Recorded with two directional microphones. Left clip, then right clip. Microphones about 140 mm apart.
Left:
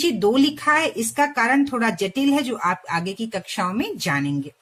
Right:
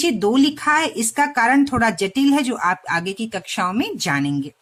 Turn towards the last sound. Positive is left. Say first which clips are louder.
# right 2 dB
turn(degrees=-40)  # may be behind; listen again after turning